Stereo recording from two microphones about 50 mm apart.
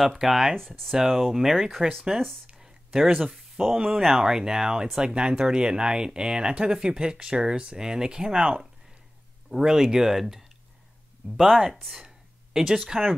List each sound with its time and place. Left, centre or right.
0.0 s speech: centre
0.6 s speech: centre
0.9 s speech: centre
12.5 s speech: centre